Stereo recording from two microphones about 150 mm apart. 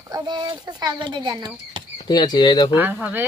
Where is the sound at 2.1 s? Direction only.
30° left (ahead or behind).